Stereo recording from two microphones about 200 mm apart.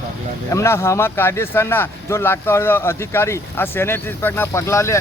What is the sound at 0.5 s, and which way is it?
Speech, 15° left (ahead or behind).